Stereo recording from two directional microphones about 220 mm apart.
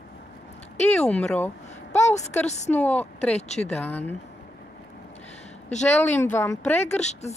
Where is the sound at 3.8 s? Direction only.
10° left (ahead or behind).